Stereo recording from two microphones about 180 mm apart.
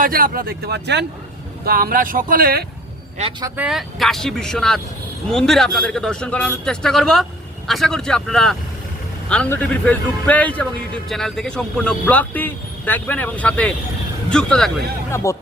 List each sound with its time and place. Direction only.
0.0 s speech: 50° right (ahead or behind); by 1.0 s 70° right (ahead or behind)
1.6 s speech: 55° right (ahead or behind)
3.4 s a man's voice: 10° right (ahead or behind)
15.1 s speech: 15° left (ahead or behind)